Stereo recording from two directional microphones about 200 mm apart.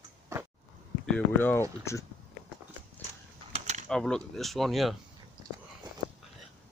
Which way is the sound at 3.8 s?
5° left (ahead or behind).